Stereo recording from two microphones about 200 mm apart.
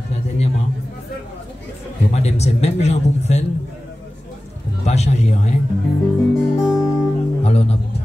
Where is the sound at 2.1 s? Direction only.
35° left (ahead or behind).